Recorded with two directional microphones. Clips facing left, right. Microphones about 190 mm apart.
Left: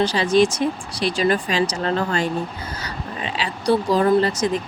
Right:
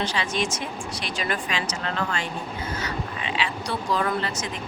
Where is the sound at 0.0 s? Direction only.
35° left (ahead or behind).